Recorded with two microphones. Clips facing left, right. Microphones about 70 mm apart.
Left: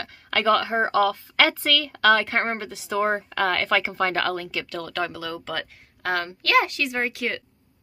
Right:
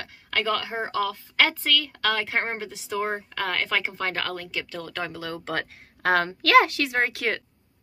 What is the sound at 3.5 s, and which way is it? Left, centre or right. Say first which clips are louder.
Speech: left 3 dB; centre.